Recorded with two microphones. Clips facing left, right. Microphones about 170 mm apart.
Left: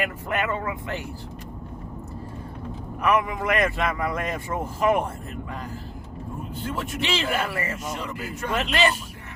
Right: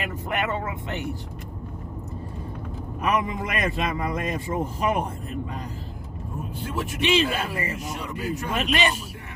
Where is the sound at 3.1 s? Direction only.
20° right (ahead or behind).